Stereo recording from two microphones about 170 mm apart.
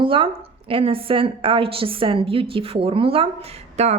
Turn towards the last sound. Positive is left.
turn(degrees=-40)  # may be behind; listen again after turning